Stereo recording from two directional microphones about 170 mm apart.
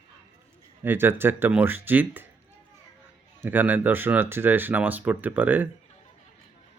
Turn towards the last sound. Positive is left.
turn(degrees=-10)  # may be behind; listen again after turning